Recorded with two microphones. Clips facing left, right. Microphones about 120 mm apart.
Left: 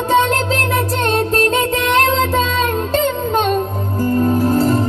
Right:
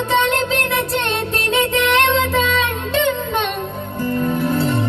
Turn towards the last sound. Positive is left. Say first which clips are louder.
# left 4 dB
turn(degrees=40)  # may be behind; listen again after turning